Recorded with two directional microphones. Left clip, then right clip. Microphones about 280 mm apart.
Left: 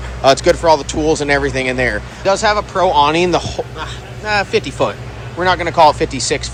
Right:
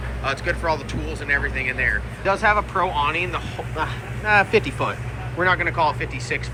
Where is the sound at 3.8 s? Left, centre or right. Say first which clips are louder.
Even; centre.